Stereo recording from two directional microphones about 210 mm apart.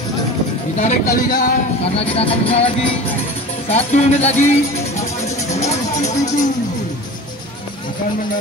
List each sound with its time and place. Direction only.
0.7 s music: 40° left (ahead or behind)
2.0 s music: 25° left (ahead or behind)
5.6 s music: 30° left (ahead or behind)